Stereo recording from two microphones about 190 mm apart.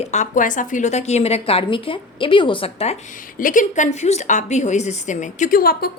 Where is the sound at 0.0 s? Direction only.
40° left (ahead or behind).